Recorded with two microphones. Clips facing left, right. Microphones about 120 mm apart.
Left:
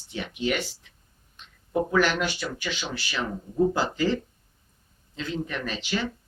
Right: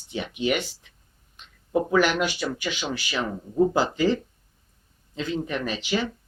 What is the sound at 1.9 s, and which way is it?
Speech, 15° right (ahead or behind).